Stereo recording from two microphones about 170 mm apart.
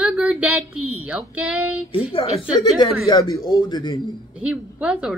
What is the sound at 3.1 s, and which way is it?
Speech, 20° left (ahead or behind).